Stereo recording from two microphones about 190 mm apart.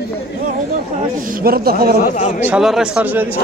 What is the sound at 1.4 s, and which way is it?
Speech, 50° right (ahead or behind).